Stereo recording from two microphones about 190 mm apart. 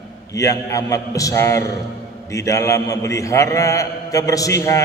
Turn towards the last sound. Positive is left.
turn(degrees=15)  # may be behind; listen again after turning